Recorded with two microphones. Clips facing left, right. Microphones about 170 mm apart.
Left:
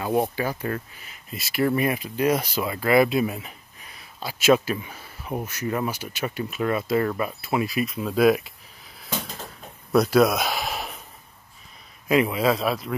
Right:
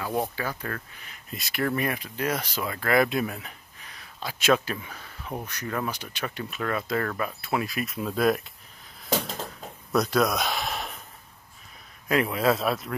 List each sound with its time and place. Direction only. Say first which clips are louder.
0.0 s speech: left 5 dB; 20° left (ahead or behind)
1.0 s speech: left 1 dB; 5° left (ahead or behind)
9.9 s a sound: left 5 dB; 5° left (ahead or behind)
12.1 s speech: left 3 dB; 5° left (ahead or behind)